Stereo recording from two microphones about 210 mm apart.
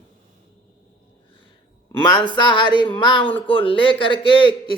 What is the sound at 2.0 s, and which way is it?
A man's voice, 20° left (ahead or behind).